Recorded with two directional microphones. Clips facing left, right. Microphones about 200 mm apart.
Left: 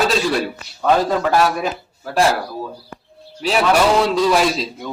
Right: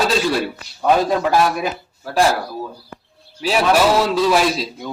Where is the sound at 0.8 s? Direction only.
15° right (ahead or behind).